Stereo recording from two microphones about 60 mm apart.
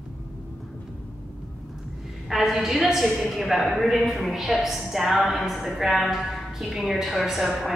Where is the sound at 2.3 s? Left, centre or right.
Centre.